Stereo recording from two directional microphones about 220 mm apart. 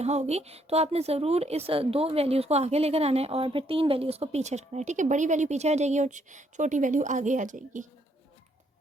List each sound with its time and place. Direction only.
0.0 s a woman's voice: 30° right (ahead or behind)